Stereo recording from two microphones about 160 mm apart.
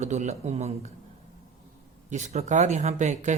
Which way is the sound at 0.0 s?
45° right (ahead or behind).